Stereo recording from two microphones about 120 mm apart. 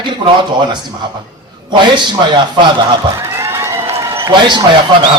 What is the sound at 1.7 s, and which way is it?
A man's voice, 40° right (ahead or behind).